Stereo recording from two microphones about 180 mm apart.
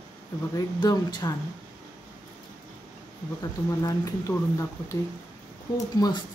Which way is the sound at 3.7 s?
20° left (ahead or behind).